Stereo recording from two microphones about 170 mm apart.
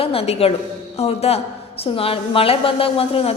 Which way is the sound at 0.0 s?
35° left (ahead or behind).